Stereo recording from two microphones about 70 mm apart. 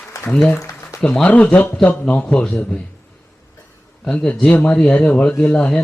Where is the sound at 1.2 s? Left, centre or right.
Left.